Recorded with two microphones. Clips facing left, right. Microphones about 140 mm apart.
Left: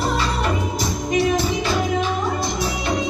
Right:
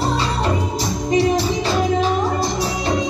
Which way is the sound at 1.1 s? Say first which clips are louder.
Right 3 dB; 35° right (ahead or behind).